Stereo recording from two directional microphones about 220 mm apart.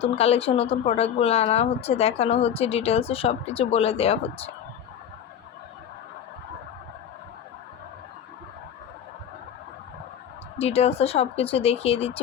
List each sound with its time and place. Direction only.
0.0 s speech: 25° left (ahead or behind)
10.6 s speech: 30° left (ahead or behind)